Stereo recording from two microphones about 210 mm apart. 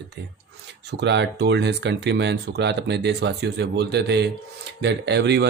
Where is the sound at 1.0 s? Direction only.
55° right (ahead or behind).